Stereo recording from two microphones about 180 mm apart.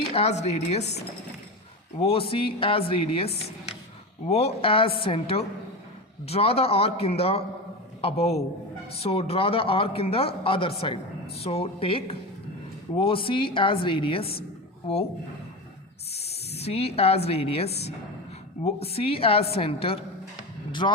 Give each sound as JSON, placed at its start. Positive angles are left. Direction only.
{"t": 0.1, "sound": "a man's voice", "side_deg": 35}
{"t": 2.0, "sound": "a man's voice", "side_deg": 30}
{"t": 16.1, "sound": "snake", "side_deg": 35}
{"t": 17.2, "sound": "a man's voice", "side_deg": 35}